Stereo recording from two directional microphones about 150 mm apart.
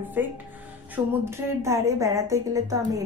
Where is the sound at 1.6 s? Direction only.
20° right (ahead or behind).